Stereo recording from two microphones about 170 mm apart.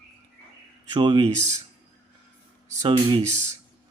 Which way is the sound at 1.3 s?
45° right (ahead or behind).